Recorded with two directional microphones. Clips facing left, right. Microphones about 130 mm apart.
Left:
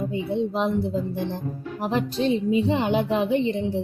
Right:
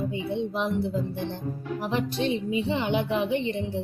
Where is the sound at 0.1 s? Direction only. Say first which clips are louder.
Left 4 dB; 40° left (ahead or behind).